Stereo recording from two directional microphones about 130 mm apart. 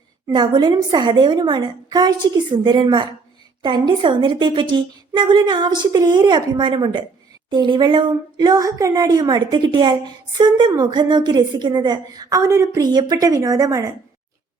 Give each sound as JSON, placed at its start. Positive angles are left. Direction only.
{"t": 0.3, "sound": "a woman's voice", "side_deg": -35}